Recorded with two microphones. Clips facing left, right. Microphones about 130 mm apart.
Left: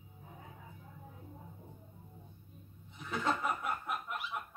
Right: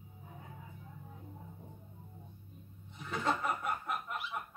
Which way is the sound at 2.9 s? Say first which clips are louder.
Even; centre (ahead or behind).